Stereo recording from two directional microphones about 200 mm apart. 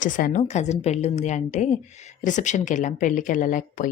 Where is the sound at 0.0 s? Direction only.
40° left (ahead or behind).